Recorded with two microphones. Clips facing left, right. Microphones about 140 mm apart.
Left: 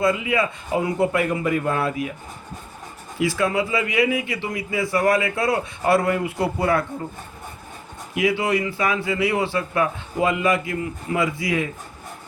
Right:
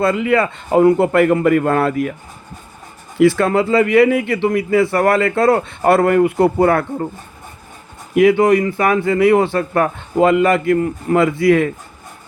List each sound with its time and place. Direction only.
0.0 s speech: 65° right (ahead or behind)
3.2 s speech: 60° right (ahead or behind)
8.1 s speech: 55° right (ahead or behind)